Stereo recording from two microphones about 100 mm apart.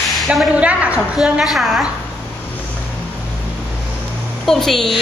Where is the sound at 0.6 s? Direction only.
10° right (ahead or behind).